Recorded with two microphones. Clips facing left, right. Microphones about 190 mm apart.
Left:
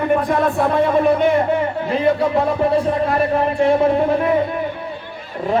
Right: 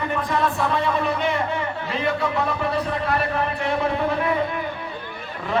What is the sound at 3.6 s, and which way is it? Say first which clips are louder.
Speech: left 8 dB; 45° left (ahead or behind).